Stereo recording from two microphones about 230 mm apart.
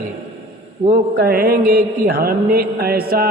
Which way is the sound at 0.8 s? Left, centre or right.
Right.